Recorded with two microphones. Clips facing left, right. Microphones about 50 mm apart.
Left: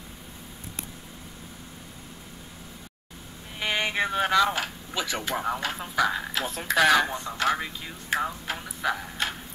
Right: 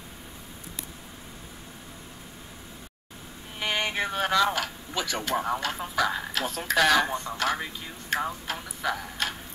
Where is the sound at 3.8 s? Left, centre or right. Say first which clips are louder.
Left 3 dB; centre.